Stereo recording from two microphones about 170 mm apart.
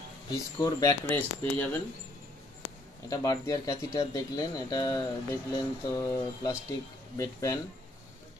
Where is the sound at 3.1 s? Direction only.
20° left (ahead or behind).